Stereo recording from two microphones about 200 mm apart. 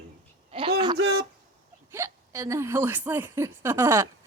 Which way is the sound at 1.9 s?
15° right (ahead or behind).